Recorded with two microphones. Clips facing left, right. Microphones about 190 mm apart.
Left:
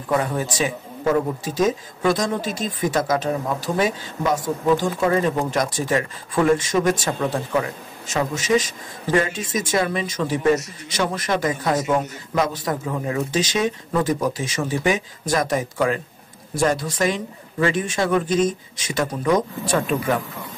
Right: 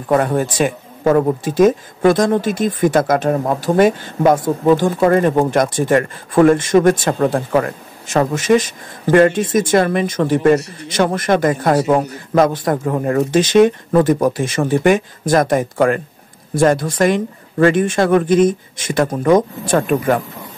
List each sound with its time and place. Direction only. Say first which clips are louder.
0.1 s speech: right 7 dB; 55° right (ahead or behind)